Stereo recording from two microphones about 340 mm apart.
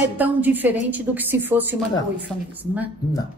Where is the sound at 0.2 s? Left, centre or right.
Centre.